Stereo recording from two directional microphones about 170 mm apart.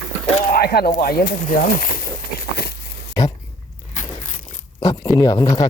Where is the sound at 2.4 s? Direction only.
65° left (ahead or behind).